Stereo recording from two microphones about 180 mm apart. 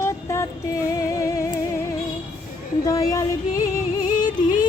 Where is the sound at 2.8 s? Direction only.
20° left (ahead or behind).